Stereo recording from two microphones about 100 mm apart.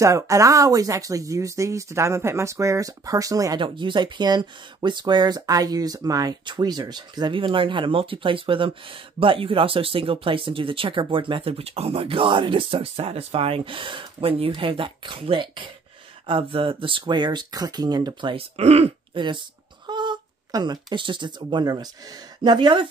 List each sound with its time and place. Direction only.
0.0 s speech: 30° right (ahead or behind)
3.5 s speech: 55° right (ahead or behind); by 6.3 s 35° right (ahead or behind)
6.4 s speech: 50° right (ahead or behind)
18.3 s speech: 90° right
19.1 s speech: 55° right (ahead or behind)